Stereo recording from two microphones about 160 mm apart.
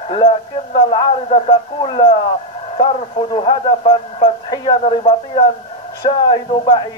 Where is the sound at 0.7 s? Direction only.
35° left (ahead or behind).